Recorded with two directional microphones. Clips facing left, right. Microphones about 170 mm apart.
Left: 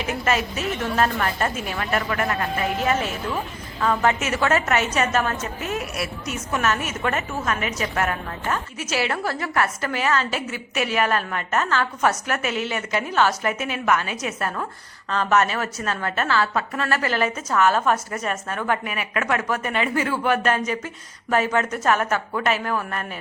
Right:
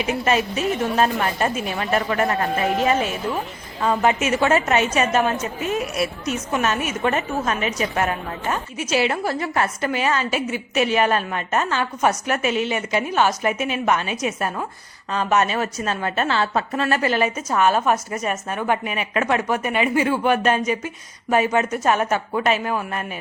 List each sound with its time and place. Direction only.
0.1 s a woman's voice: 20° right (ahead or behind)